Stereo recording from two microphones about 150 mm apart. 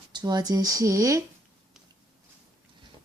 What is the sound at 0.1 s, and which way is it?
Speech, 30° right (ahead or behind).